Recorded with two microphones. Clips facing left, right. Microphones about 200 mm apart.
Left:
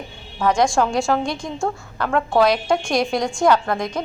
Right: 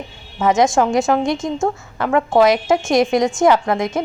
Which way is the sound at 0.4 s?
20° right (ahead or behind).